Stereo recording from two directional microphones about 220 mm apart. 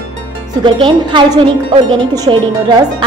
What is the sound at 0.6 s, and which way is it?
A woman's voice, 20° right (ahead or behind).